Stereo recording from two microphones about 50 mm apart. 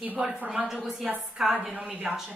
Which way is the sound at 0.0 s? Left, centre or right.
Right.